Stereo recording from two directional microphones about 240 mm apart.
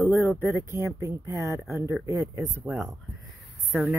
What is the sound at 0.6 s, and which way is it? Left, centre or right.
Speech, centre.